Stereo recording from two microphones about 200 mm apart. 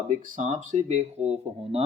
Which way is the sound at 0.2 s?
40° right (ahead or behind).